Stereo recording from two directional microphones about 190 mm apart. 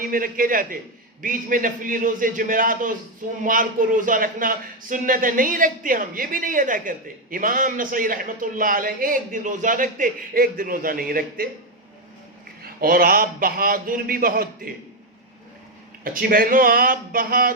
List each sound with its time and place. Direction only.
0.0 s speech: 45° right (ahead or behind)
12.6 s speech: 50° right (ahead or behind)
16.3 s speech: 45° right (ahead or behind)